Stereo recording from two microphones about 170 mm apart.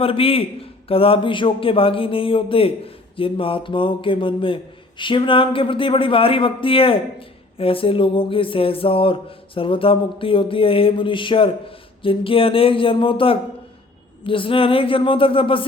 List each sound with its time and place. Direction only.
0.0 s a man's voice: 35° left (ahead or behind)